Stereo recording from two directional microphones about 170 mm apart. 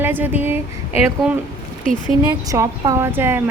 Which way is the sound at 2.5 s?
20° right (ahead or behind).